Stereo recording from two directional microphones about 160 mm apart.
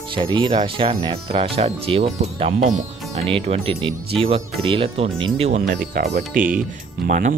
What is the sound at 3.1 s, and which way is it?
Speech, 40° right (ahead or behind).